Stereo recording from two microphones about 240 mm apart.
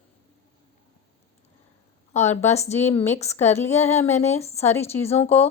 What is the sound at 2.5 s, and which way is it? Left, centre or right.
Speech, left.